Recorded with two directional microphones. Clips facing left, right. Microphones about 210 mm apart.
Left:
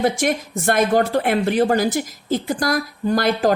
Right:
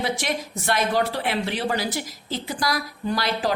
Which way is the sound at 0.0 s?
50° left (ahead or behind).